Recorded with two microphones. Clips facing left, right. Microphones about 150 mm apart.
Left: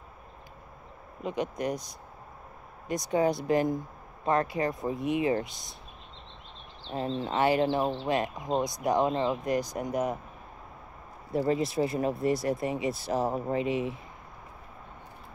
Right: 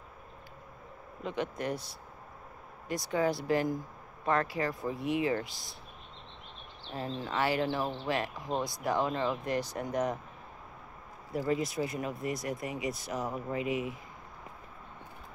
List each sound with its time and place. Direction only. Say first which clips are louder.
1.2 s speech: left 3 dB; 15° left (ahead or behind)
6.9 s speech: left 5 dB; 25° left (ahead or behind)
11.3 s speech: left 4 dB; 30° left (ahead or behind)